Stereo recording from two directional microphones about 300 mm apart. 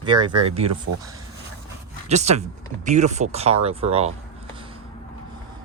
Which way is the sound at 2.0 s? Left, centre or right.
Right.